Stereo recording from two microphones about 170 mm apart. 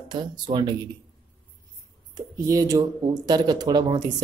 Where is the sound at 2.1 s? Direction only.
20° right (ahead or behind).